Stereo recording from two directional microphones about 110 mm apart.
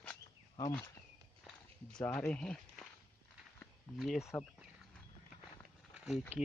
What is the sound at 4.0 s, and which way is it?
Speech, centre (ahead or behind).